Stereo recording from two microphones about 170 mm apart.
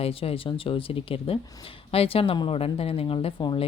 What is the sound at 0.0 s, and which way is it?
Speech, 35° left (ahead or behind).